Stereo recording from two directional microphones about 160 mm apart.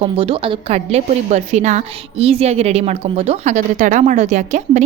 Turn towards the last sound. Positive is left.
turn(degrees=-45)  # may be behind; listen again after turning